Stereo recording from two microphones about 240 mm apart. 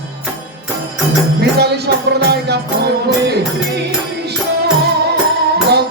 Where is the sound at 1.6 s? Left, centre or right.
Right.